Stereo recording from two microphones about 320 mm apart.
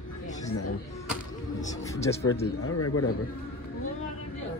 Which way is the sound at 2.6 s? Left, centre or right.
Left.